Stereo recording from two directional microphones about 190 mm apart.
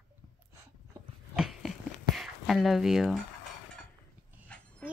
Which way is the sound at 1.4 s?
Centre (ahead or behind).